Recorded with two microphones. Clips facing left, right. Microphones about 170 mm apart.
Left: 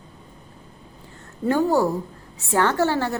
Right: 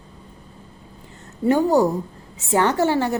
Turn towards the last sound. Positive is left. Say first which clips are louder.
# right 2 dB
turn(degrees=-15)  # may be behind; listen again after turning